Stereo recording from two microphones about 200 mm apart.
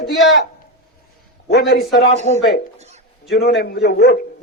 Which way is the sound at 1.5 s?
55° left (ahead or behind).